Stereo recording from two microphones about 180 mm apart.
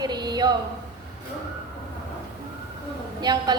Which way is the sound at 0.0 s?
25° right (ahead or behind).